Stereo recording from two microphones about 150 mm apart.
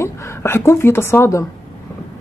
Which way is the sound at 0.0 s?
20° left (ahead or behind).